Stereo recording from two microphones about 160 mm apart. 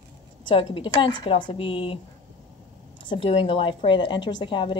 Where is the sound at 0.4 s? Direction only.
30° left (ahead or behind).